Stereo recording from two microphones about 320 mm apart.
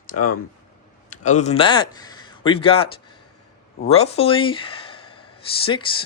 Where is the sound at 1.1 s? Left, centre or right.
Left.